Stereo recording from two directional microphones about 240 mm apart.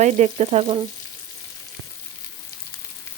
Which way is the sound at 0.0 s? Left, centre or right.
Right.